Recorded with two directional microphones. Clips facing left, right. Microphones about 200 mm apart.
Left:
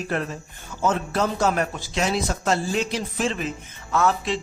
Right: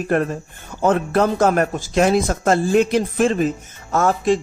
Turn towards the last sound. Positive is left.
turn(degrees=-45)  # may be behind; listen again after turning